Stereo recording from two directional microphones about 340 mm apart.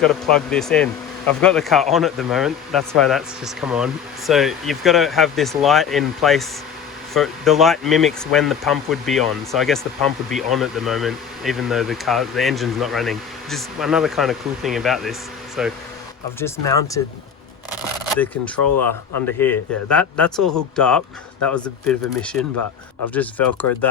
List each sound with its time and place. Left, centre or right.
0.1 s speech: centre
16.4 s speech: centre
18.1 s speech: centre